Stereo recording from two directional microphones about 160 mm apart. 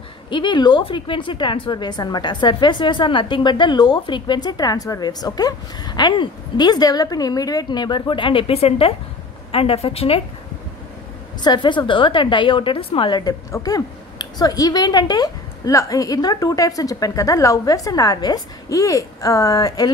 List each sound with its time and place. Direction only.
0.3 s a woman's voice: 30° left (ahead or behind)
11.4 s a woman's voice: 30° left (ahead or behind)